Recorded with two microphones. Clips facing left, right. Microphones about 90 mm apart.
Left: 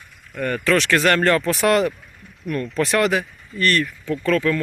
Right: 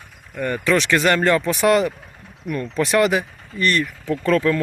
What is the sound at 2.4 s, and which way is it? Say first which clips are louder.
Speech: even; 15° right (ahead or behind).